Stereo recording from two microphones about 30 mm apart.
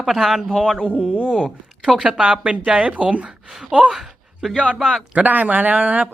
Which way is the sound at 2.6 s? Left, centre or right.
Right.